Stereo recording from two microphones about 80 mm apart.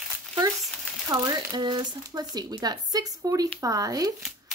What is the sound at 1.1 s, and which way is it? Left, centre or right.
Speech, right.